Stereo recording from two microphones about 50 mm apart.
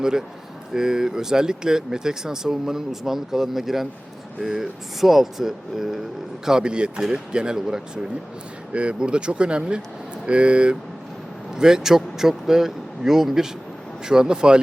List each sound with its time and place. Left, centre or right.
0.0 s speech: centre
8.7 s speech: right